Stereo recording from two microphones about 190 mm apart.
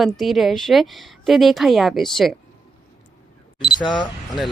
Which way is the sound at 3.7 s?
25° left (ahead or behind).